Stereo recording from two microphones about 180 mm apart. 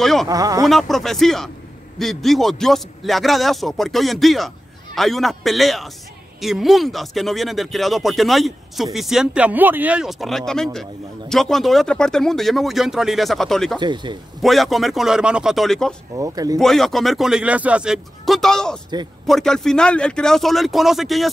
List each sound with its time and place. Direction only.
0.0 s speech: centre (ahead or behind)
0.3 s speech: 20° right (ahead or behind)
0.7 s speech: centre (ahead or behind)
13.7 s speech: 25° right (ahead or behind)
14.4 s speech: centre (ahead or behind)
16.2 s speech: 20° right (ahead or behind)
16.5 s speech: centre (ahead or behind)